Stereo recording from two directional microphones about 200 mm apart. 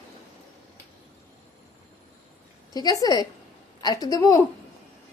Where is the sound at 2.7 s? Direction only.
20° left (ahead or behind).